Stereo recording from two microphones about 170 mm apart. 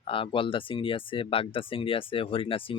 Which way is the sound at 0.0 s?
30° left (ahead or behind).